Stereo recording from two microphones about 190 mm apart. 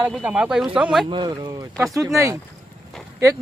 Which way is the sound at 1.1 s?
25° right (ahead or behind).